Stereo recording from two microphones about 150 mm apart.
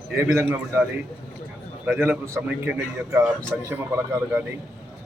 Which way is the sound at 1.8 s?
10° right (ahead or behind).